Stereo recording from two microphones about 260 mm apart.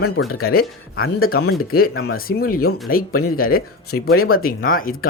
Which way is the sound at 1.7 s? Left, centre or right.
Left.